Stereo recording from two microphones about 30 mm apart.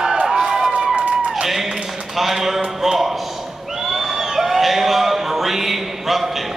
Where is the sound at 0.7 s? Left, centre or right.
Right.